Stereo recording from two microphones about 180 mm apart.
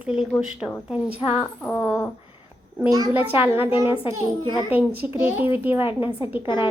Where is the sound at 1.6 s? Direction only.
10° left (ahead or behind).